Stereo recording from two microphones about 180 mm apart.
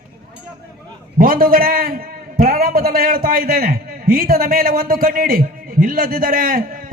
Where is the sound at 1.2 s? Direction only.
55° right (ahead or behind).